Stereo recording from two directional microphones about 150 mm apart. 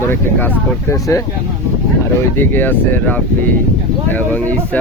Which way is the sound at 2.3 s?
15° left (ahead or behind).